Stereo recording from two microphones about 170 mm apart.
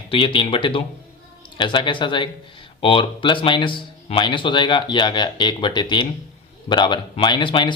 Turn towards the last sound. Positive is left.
turn(degrees=25)  # may be behind; listen again after turning